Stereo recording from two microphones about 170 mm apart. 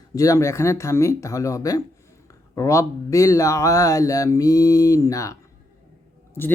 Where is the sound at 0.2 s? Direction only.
20° left (ahead or behind).